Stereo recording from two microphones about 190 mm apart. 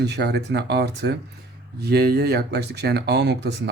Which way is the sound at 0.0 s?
60° right (ahead or behind).